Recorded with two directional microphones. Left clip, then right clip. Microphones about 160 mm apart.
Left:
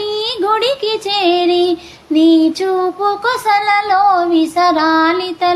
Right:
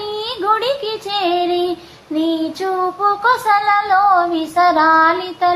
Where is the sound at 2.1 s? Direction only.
40° left (ahead or behind).